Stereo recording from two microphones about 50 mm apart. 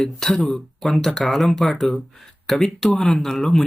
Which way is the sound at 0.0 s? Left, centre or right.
Centre.